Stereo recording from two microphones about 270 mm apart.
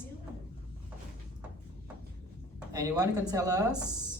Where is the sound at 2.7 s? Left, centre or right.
Centre.